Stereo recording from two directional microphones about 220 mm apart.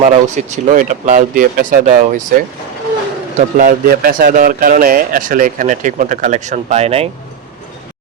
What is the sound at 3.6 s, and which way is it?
Speech, 40° right (ahead or behind).